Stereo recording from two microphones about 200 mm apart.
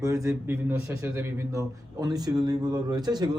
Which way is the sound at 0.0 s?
15° right (ahead or behind).